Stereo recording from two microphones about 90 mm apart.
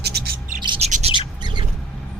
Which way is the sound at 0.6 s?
60° right (ahead or behind).